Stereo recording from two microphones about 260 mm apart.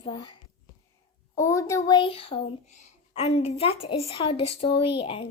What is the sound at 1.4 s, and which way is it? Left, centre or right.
A child's voice, centre.